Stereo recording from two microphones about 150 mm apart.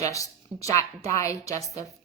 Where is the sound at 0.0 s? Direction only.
20° left (ahead or behind).